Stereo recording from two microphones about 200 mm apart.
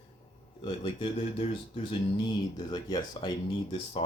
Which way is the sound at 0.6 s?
25° left (ahead or behind).